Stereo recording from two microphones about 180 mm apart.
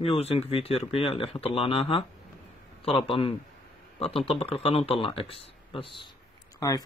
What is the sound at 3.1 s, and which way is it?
Speech, 30° left (ahead or behind).